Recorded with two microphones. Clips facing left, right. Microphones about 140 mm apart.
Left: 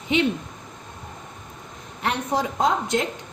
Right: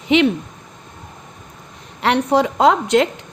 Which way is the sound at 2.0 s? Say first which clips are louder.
Right 8 dB; 70° right (ahead or behind).